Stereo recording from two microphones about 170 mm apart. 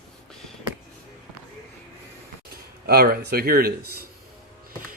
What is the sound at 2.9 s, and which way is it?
Speech, 65° right (ahead or behind).